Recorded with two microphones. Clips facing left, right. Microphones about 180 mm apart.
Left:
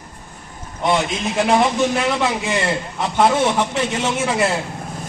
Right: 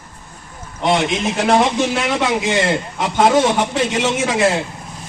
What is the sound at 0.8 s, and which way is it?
A man's voice, 90° right.